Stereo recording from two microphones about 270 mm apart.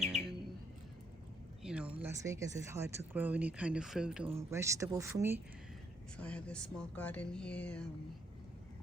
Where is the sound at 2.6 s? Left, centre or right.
Centre.